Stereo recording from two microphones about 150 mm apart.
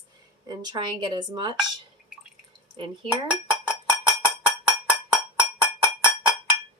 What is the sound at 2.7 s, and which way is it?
Speech, 35° right (ahead or behind).